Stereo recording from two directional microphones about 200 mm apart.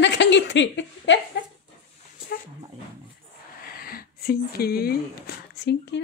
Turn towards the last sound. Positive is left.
turn(degrees=55)  # may be behind; listen again after turning